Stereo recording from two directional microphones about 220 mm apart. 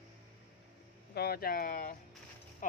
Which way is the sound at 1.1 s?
45° left (ahead or behind).